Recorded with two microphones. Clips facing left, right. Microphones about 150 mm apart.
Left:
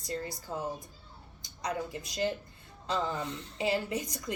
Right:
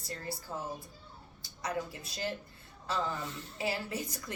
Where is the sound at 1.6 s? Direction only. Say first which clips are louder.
Left 2 dB; 20° left (ahead or behind).